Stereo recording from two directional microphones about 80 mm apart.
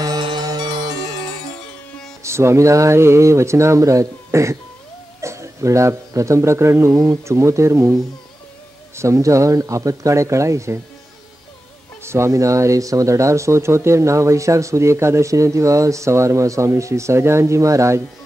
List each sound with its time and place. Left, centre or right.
0.2 s music: right
2.2 s a man's voice: right
6.9 s speech: right
8.9 s speech: right
12.0 s speech: right